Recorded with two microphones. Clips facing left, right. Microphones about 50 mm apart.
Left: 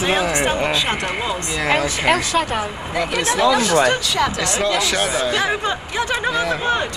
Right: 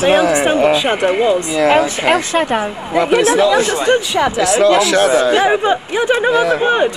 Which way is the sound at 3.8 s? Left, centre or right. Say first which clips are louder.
Right 4 dB; right.